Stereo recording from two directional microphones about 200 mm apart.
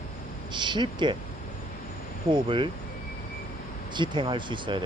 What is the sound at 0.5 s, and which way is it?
Speech, 20° right (ahead or behind).